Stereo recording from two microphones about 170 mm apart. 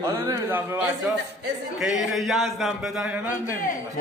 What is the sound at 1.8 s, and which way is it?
A man's voice, centre (ahead or behind).